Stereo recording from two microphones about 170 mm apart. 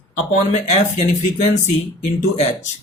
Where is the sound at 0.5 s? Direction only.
40° left (ahead or behind).